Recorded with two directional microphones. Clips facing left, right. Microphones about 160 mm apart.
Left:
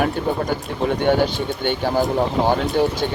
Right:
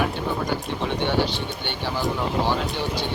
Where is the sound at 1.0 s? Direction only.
50° left (ahead or behind).